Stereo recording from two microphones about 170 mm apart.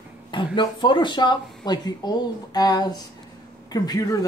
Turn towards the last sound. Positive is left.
turn(degrees=20)  # may be behind; listen again after turning